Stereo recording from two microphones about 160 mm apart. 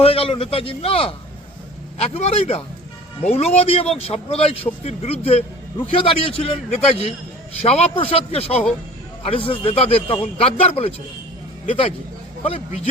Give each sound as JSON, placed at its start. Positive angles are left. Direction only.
{"t": 0.0, "sound": "a man's voice", "side_deg": 35}
{"t": 12.4, "sound": "a man's voice", "side_deg": 40}